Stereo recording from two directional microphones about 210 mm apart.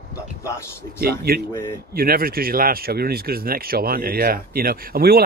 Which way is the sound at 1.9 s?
45° right (ahead or behind).